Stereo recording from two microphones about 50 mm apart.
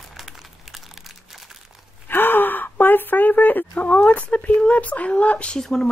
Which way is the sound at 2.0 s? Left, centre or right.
Left.